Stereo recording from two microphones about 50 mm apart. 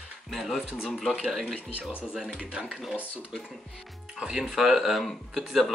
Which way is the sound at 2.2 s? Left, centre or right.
Right.